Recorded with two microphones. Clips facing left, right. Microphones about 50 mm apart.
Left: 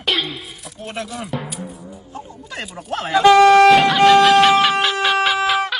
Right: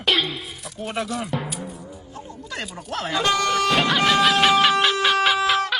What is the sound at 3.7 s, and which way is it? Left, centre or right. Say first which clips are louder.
Speech: left 8 dB; centre.